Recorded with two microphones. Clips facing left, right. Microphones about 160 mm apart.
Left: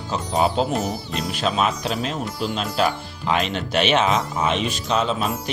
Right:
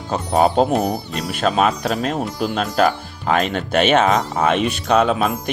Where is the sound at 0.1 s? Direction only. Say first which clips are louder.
Right 5 dB; 55° right (ahead or behind).